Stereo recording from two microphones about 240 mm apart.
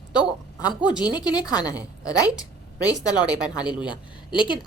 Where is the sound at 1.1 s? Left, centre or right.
Centre.